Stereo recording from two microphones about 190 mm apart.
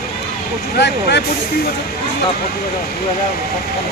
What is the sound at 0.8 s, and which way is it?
Speech, 65° left (ahead or behind).